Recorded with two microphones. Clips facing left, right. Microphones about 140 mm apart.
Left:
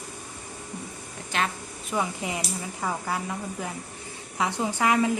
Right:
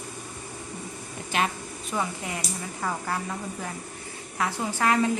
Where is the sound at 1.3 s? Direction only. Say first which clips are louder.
Right 1 dB; 10° right (ahead or behind).